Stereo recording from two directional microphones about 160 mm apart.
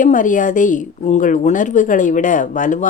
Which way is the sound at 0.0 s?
55° left (ahead or behind).